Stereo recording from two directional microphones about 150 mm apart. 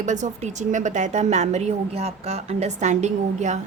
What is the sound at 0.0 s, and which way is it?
A woman's voice, 55° right (ahead or behind).